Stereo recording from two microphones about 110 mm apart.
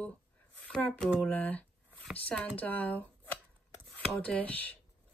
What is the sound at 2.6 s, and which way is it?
Speech, 15° left (ahead or behind).